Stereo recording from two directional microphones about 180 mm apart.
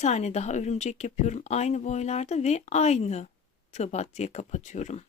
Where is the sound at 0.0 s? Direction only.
40° left (ahead or behind).